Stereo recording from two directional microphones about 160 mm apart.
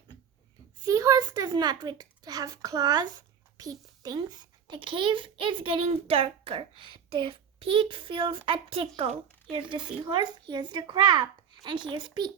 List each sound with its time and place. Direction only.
0.9 s a child's voice: 20° right (ahead or behind)